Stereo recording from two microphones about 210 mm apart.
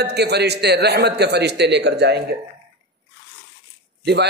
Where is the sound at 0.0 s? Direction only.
50° right (ahead or behind).